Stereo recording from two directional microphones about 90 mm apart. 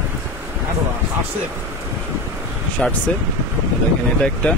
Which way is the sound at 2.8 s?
10° left (ahead or behind).